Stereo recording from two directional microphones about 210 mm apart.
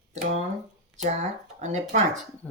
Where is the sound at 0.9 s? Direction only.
35° right (ahead or behind).